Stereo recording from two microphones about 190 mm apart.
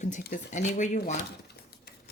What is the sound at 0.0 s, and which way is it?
Speech, 40° left (ahead or behind).